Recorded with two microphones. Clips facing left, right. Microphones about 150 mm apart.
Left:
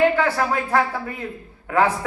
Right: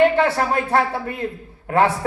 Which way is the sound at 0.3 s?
25° right (ahead or behind).